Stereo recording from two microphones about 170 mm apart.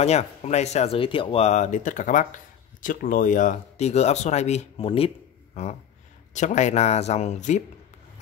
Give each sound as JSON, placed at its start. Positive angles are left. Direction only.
{"t": 0.0, "sound": "speech", "side_deg": 40}